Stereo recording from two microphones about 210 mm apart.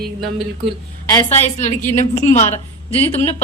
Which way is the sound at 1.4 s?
35° left (ahead or behind).